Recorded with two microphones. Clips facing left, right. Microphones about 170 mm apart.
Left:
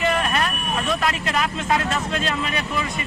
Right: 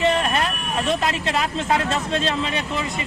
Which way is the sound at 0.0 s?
25° right (ahead or behind).